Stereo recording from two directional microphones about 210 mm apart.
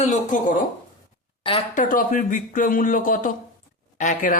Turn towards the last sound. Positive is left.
turn(degrees=35)  # may be behind; listen again after turning